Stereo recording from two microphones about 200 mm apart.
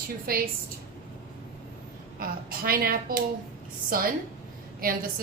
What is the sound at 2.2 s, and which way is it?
Speech, 50° right (ahead or behind).